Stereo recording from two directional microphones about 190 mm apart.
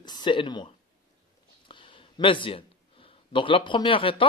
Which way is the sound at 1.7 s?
25° left (ahead or behind).